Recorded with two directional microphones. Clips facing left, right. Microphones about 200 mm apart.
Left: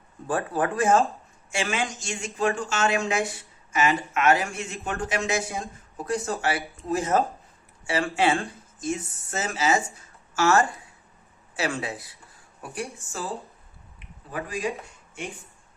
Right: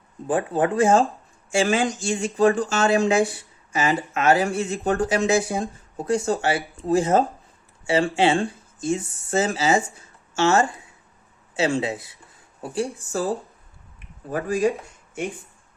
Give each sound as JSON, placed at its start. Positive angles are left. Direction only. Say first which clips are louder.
{"t": 0.3, "sound": "speech", "louder": "right 4 dB", "side_deg": -20}